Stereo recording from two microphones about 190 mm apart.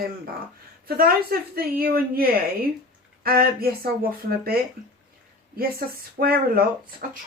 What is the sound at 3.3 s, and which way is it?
A woman's voice, 50° right (ahead or behind).